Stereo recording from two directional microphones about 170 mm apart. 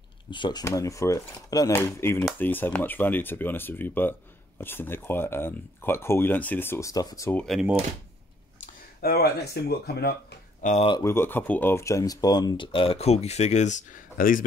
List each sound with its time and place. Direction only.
0.3 s speech: 25° left (ahead or behind)
7.3 s speech: centre (ahead or behind)
9.0 s speech: 70° left (ahead or behind)
10.6 s speech: 45° left (ahead or behind)
10.9 s speech: 15° left (ahead or behind); by 14.4 s 55° left (ahead or behind)